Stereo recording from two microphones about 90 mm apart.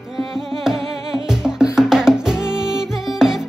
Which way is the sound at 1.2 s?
5° right (ahead or behind).